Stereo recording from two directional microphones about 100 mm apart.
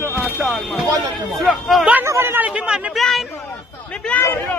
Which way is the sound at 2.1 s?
25° right (ahead or behind).